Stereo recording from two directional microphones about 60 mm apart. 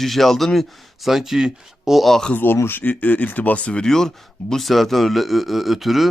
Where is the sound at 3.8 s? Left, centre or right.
Centre.